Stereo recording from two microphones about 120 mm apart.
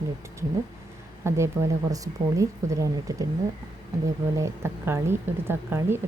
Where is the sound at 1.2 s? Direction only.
25° right (ahead or behind).